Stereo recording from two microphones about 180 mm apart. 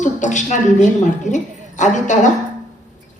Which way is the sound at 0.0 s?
45° left (ahead or behind).